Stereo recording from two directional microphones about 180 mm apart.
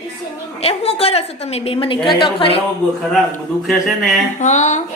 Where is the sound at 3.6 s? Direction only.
Centre (ahead or behind).